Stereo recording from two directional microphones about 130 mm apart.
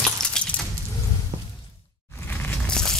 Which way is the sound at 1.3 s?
40° right (ahead or behind).